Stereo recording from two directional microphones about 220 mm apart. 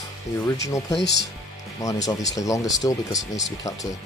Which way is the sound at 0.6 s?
15° left (ahead or behind).